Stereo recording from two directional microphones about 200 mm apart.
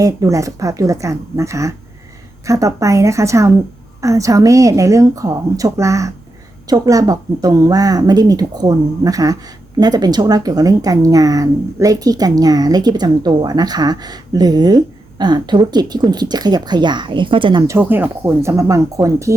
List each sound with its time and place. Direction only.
0.0 s a woman's voice: 15° right (ahead or behind)